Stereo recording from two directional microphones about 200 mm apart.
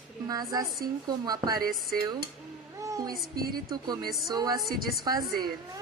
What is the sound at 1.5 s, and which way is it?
Speech, 45° right (ahead or behind).